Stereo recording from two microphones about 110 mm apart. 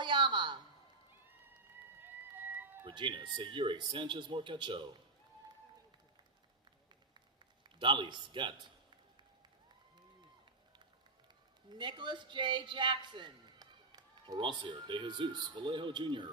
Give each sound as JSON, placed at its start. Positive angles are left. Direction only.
{"t": 0.0, "sound": "a sound", "side_deg": -45}
{"t": 2.0, "sound": "cat", "side_deg": -15}
{"t": 2.8, "sound": "a man's voice", "side_deg": -50}
{"t": 7.6, "sound": "a man's voice", "side_deg": -45}
{"t": 11.7, "sound": "a man's voice", "side_deg": -45}